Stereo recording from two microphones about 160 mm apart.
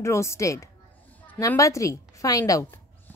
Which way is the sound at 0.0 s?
20° left (ahead or behind).